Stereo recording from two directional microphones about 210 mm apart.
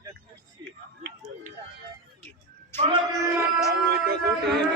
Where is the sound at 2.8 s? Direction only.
20° right (ahead or behind).